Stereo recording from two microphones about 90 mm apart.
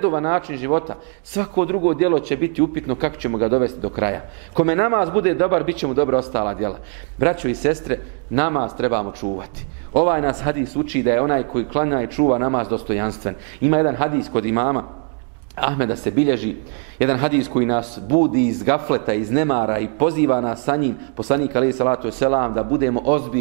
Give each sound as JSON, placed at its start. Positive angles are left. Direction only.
{"t": 0.0, "sound": "a man's voice", "side_deg": -20}